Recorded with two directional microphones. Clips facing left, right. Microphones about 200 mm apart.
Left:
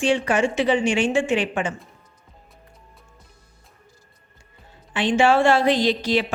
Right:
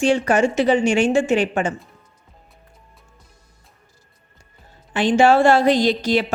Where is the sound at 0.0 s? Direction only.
40° right (ahead or behind).